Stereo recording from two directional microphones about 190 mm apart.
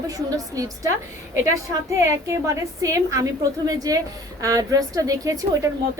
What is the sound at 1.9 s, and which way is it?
A woman's voice, 15° right (ahead or behind).